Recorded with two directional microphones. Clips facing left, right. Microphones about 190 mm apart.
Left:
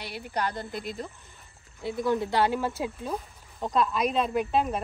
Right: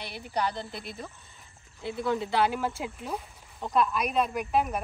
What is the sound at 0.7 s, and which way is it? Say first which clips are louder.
Speech: left 5 dB; 15° left (ahead or behind).